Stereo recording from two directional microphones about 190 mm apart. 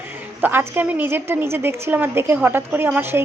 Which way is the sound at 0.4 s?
10° right (ahead or behind).